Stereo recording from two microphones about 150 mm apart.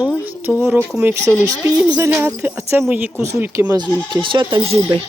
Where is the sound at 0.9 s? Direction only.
5° right (ahead or behind).